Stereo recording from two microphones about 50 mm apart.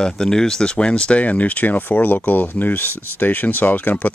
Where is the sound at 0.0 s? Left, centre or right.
Centre.